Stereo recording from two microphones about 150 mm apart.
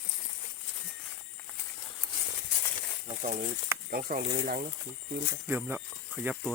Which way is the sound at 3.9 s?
80° right.